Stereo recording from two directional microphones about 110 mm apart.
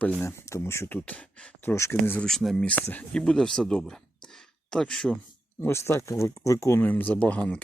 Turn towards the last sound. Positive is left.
turn(degrees=10)  # may be behind; listen again after turning